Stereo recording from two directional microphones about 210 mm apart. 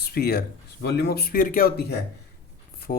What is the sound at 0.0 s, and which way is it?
Speech, 50° left (ahead or behind).